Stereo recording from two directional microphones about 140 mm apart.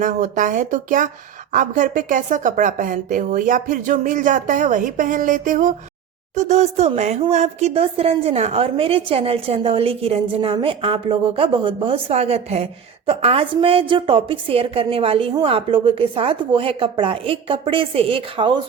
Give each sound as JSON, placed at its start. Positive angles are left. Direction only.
{"t": 0.0, "sound": "speech", "side_deg": -65}
{"t": 6.3, "sound": "a woman's voice", "side_deg": -55}